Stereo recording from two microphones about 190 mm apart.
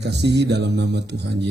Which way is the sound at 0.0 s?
65° right (ahead or behind).